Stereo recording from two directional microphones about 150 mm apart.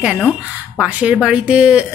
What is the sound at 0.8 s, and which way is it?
A woman's voice, 5° right (ahead or behind).